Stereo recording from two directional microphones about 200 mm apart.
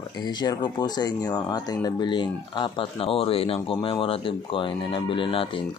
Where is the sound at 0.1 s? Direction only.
20° left (ahead or behind).